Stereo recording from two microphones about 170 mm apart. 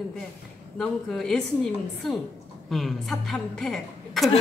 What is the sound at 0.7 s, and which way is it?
A woman's voice, 5° left (ahead or behind).